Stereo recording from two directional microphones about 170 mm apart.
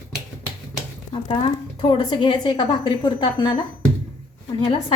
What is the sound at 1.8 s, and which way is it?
A woman's voice, 30° left (ahead or behind).